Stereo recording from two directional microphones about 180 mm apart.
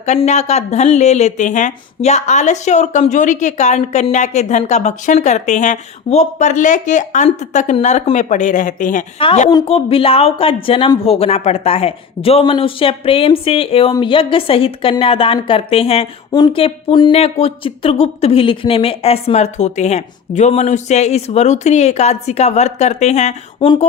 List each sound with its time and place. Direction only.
0.0 s a woman's voice: 40° left (ahead or behind)
9.1 s a woman's voice: 35° left (ahead or behind)